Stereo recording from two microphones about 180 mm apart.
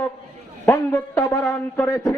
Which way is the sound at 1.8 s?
20° left (ahead or behind).